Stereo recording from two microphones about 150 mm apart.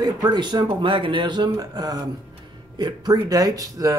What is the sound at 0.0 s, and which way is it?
Speech, 30° right (ahead or behind).